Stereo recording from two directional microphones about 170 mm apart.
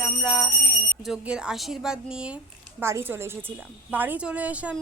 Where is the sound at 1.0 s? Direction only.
5° right (ahead or behind).